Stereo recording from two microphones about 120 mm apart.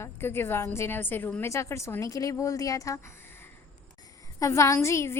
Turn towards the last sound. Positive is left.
turn(degrees=25)  # may be behind; listen again after turning